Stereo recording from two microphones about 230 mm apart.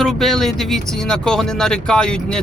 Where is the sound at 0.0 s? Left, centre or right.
Centre.